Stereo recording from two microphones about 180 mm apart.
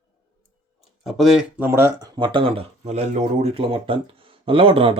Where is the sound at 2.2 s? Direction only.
25° right (ahead or behind).